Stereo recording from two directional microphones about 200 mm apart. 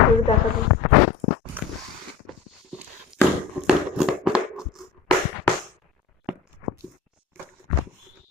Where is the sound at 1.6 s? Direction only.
10° right (ahead or behind).